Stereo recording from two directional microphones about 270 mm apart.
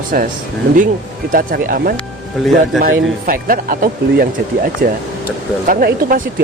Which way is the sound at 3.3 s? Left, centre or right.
Right.